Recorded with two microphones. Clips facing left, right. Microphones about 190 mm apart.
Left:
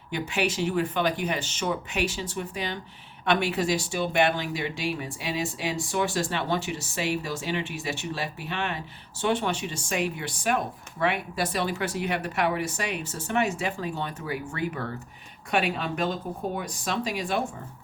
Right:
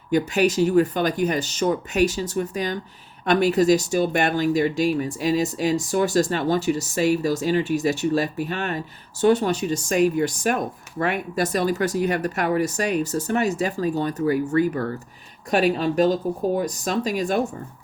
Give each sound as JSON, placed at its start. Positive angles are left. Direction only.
{"t": 0.1, "sound": "speech", "side_deg": -40}